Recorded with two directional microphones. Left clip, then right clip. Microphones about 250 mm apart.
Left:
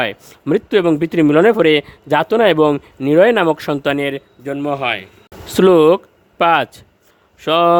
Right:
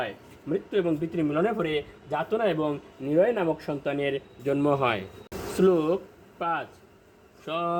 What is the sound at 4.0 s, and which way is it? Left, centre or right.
Speech, left.